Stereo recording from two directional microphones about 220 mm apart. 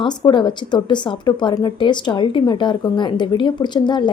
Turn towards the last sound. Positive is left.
turn(degrees=20)  # may be behind; listen again after turning